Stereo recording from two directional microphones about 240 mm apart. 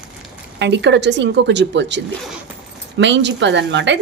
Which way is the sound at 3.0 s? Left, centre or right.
Right.